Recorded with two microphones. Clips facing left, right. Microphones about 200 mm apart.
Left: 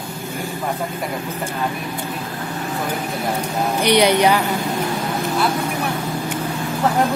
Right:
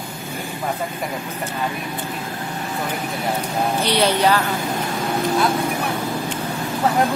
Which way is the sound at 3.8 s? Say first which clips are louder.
Left 5 dB; 15° left (ahead or behind).